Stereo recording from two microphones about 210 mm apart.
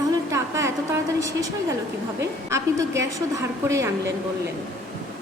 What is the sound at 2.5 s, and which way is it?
A woman's voice, 15° right (ahead or behind).